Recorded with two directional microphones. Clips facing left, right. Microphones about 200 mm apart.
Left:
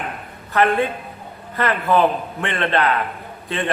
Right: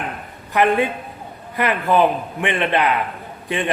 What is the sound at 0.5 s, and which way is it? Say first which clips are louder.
A man's voice: right 1 dB; 15° right (ahead or behind).